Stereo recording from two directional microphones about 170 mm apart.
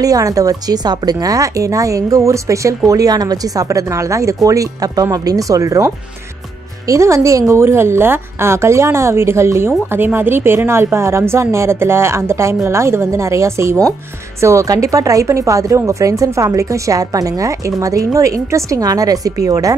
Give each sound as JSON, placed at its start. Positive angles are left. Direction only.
{"t": 0.0, "sound": "a woman's voice", "side_deg": -20}